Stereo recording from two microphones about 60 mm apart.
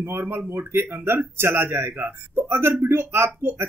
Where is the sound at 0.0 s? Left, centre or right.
Right.